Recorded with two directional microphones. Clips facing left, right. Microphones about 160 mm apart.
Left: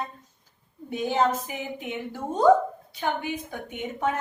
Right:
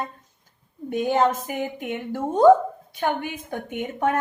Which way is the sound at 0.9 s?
50° right (ahead or behind).